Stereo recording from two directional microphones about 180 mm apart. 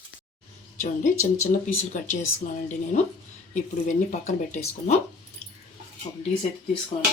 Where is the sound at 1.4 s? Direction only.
45° left (ahead or behind).